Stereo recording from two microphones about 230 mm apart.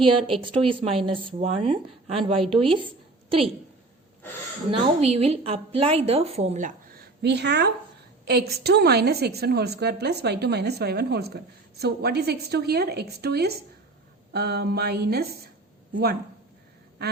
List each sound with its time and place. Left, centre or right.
0.0 s a woman's voice: right
4.9 s a woman's voice: right
17.0 s quack: right